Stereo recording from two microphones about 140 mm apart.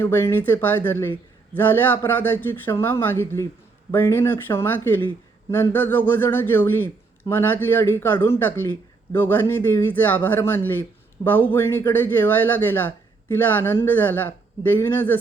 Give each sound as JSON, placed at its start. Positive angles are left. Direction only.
{"t": 0.0, "sound": "speech", "side_deg": 15}